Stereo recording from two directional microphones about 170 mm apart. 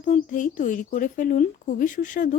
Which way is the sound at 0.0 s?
50° left (ahead or behind).